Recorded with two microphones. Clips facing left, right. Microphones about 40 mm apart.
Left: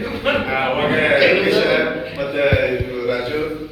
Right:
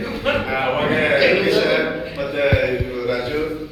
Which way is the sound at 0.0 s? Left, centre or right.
Centre.